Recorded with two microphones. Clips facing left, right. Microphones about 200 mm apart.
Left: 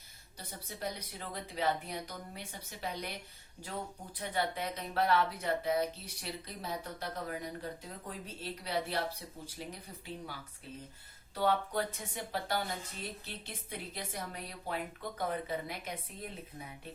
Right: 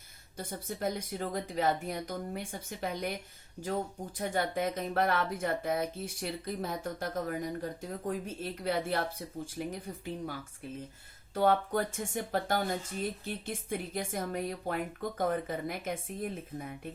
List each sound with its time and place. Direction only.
0.3 s speech: 50° right (ahead or behind)
4.2 s speech: 45° right (ahead or behind)
11.3 s speech: 50° right (ahead or behind)